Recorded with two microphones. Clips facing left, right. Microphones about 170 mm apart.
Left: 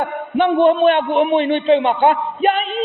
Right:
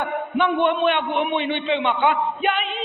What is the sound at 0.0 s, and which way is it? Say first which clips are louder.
A man's voice: left 4 dB; 35° left (ahead or behind).